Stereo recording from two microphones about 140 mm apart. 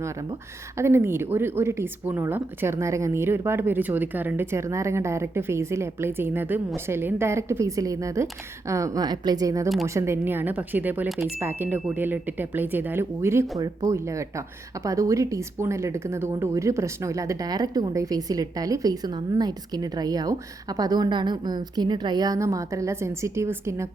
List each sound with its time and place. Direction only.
0.0 s a woman's voice: 25° right (ahead or behind)